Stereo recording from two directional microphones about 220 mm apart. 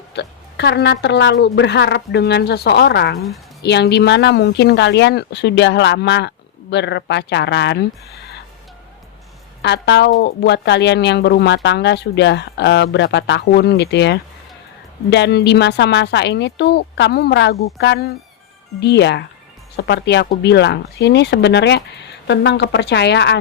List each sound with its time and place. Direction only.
0.1 s speech: 50° left (ahead or behind)
9.6 s speech: 50° left (ahead or behind)